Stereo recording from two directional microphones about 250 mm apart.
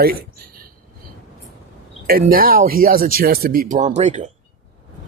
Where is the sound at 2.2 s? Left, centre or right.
Right.